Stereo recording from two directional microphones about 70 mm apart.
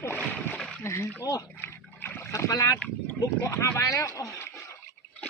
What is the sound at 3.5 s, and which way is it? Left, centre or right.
Speech, left.